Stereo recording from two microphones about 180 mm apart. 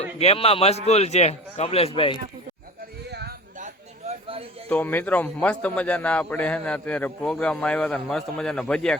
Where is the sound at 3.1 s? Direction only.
65° right (ahead or behind).